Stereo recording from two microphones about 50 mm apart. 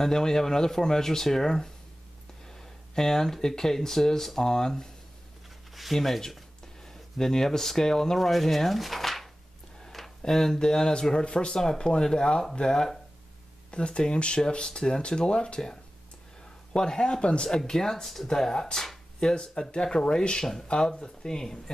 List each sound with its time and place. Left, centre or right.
0.0 s speech: centre
2.9 s speech: centre
5.8 s speech: centre
13.7 s speech: left